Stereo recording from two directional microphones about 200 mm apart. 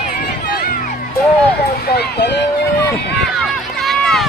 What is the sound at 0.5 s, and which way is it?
Music, 50° left (ahead or behind).